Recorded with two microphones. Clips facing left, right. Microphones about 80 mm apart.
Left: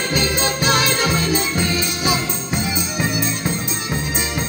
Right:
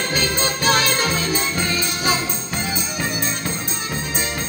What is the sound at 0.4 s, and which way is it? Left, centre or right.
Music, right.